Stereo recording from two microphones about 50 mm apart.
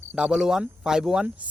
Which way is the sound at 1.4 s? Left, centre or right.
Right.